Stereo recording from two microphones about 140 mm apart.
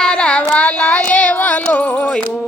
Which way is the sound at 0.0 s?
5° left (ahead or behind).